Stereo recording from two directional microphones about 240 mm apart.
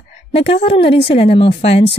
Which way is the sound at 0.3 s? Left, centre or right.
Left.